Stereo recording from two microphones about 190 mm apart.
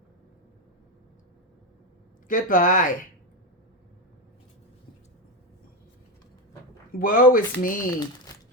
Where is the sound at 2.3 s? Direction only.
45° left (ahead or behind).